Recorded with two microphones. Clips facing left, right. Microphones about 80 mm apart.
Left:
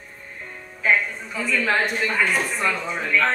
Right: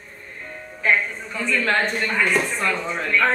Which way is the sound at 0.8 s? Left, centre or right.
Centre.